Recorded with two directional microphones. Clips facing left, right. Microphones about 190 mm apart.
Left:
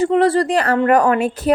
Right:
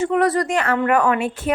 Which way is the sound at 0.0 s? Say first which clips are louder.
Left 4 dB; 30° left (ahead or behind).